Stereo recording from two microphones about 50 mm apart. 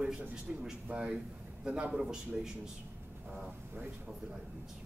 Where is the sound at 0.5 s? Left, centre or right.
Centre.